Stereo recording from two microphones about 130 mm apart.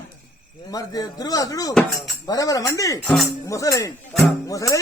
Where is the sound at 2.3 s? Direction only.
25° left (ahead or behind).